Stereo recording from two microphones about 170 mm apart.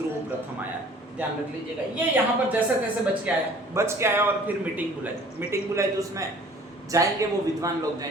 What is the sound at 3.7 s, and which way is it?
A man's voice, 15° right (ahead or behind).